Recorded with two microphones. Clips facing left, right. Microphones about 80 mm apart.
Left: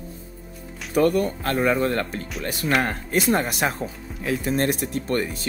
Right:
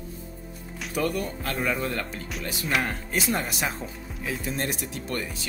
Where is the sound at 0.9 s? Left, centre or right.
Left.